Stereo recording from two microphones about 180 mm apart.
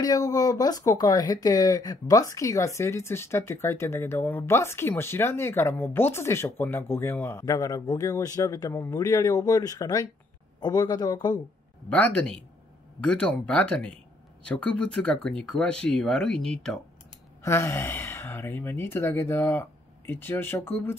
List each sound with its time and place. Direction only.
0.0 s speech: 20° left (ahead or behind)
11.9 s speech: 5° left (ahead or behind)
17.4 s speech: 15° left (ahead or behind)